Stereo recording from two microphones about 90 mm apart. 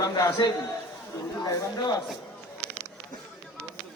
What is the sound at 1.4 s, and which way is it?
Speech, 45° left (ahead or behind).